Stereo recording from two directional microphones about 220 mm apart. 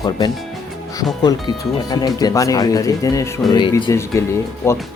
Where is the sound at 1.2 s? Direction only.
20° left (ahead or behind).